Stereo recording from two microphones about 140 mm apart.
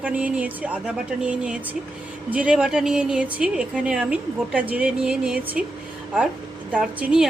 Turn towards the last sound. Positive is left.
turn(degrees=-5)  # may be behind; listen again after turning